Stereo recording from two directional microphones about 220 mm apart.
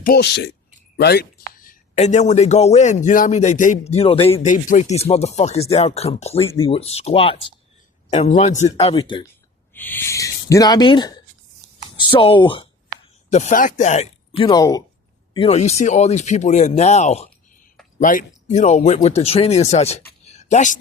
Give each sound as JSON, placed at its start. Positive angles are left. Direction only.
{"t": 0.0, "sound": "speech", "side_deg": 45}
{"t": 9.7, "sound": "speech", "side_deg": 10}
{"t": 13.3, "sound": "speech", "side_deg": 35}
{"t": 20.2, "sound": "a sound", "side_deg": 30}